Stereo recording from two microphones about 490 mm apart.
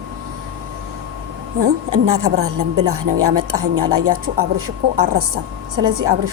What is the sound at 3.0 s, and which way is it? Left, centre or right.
Speech, right.